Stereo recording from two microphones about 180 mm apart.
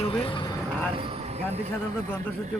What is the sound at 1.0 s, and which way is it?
Speech, 30° right (ahead or behind).